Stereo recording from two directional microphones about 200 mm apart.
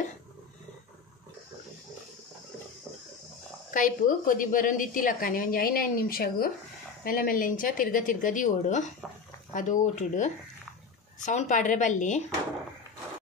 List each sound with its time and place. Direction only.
3.7 s a woman's voice: 40° left (ahead or behind)